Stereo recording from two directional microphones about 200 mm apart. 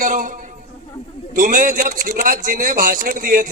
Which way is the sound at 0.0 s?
40° right (ahead or behind).